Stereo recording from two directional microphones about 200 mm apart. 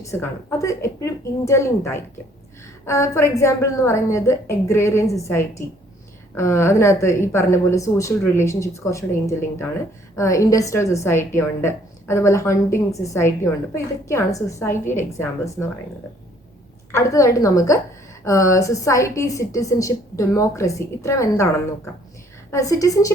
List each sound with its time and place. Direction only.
0.0 s a woman's voice: 15° left (ahead or behind)
16.9 s a woman's voice: 15° left (ahead or behind)
22.5 s a woman's voice: 15° left (ahead or behind)